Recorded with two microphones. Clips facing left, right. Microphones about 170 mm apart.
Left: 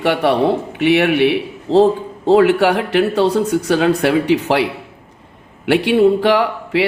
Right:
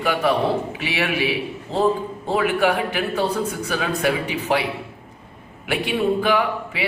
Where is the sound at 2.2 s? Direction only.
90° left.